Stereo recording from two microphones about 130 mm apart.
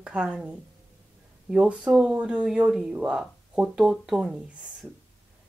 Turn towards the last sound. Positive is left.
turn(degrees=-5)  # may be behind; listen again after turning